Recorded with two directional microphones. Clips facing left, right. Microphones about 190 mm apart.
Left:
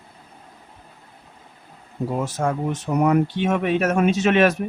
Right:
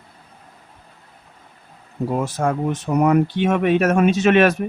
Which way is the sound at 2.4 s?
60° right (ahead or behind).